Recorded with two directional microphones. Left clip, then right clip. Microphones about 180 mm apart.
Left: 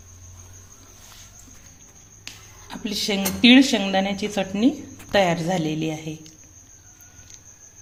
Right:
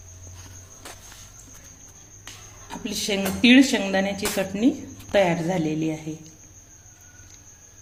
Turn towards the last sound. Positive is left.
turn(degrees=45)  # may be behind; listen again after turning